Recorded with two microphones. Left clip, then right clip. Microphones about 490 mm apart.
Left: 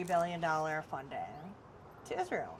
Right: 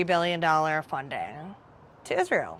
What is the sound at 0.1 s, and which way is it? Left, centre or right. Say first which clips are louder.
Speech: right 7 dB; right.